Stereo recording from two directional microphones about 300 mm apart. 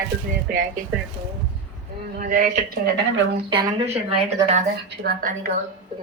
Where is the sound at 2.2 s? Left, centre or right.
Right.